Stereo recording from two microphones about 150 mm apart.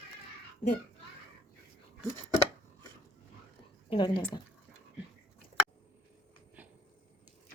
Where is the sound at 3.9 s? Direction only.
30° left (ahead or behind).